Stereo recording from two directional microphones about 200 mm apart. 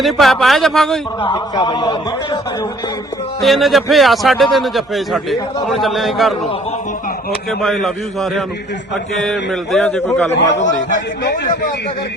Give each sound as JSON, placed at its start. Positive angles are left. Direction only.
{"t": 0.0, "sound": "a man's voice", "side_deg": 0}
{"t": 1.2, "sound": "a man's voice", "side_deg": 25}
{"t": 3.4, "sound": "a man's voice", "side_deg": 0}
{"t": 7.6, "sound": "a man's voice", "side_deg": 0}
{"t": 11.2, "sound": "speech", "side_deg": 55}